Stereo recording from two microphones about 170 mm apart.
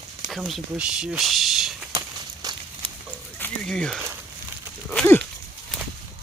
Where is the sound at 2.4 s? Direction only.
20° right (ahead or behind).